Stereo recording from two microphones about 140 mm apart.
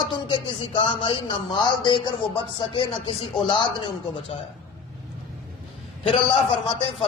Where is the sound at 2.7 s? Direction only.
40° left (ahead or behind).